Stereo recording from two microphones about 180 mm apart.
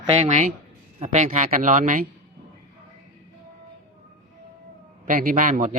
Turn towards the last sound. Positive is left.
turn(degrees=-45)  # may be behind; listen again after turning